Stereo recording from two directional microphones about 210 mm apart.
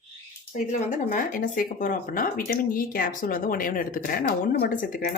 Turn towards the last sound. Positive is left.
turn(degrees=45)  # may be behind; listen again after turning